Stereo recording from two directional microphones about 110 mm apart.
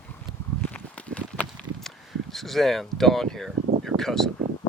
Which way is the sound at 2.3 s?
Centre (ahead or behind).